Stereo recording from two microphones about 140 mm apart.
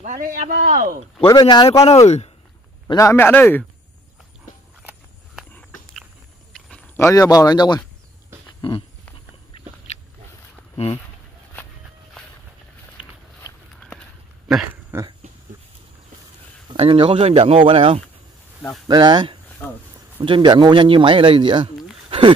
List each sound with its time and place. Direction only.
0.0 s speech: 85° right
1.2 s speech: 30° left (ahead or behind)
2.0 s speech: 50° left (ahead or behind)
3.0 s speech: 20° left (ahead or behind)
7.0 s speech: 20° left (ahead or behind)
8.5 s a sound: 35° left (ahead or behind)
13.7 s a sound: 5° left (ahead or behind)
14.5 s a sound: 15° right (ahead or behind)
16.6 s speech: 40° right (ahead or behind)